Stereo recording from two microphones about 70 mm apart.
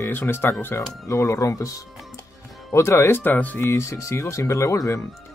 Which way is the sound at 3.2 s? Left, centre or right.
Left.